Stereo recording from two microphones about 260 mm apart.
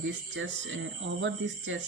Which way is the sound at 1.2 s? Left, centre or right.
Right.